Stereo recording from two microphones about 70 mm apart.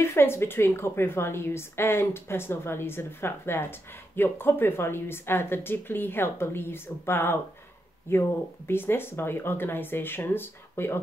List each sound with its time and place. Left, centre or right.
0.0 s a woman's voice: left